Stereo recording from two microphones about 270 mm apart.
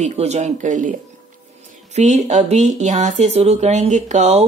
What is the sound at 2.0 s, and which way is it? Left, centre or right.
A woman's voice, right.